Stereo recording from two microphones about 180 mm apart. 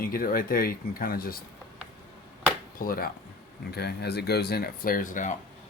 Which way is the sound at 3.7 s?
65° left (ahead or behind).